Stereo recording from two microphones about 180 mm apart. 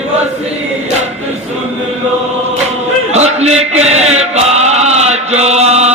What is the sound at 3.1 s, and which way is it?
Chant, 35° right (ahead or behind).